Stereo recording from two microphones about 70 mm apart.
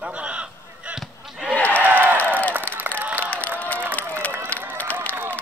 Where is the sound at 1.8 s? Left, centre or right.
Right.